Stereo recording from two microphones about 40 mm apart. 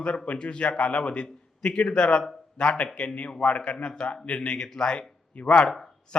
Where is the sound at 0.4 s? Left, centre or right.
Left.